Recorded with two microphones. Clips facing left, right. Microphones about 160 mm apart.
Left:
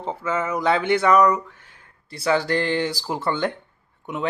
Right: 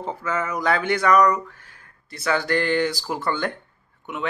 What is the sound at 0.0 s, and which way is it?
Speech, 25° left (ahead or behind).